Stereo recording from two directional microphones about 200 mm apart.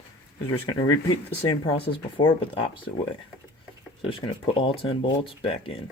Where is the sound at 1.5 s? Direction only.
25° left (ahead or behind).